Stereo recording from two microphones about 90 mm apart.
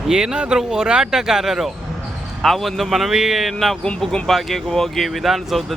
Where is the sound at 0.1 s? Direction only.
5° right (ahead or behind).